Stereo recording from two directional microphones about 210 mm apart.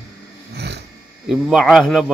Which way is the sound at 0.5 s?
50° right (ahead or behind).